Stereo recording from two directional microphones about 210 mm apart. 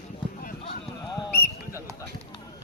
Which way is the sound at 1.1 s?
10° left (ahead or behind).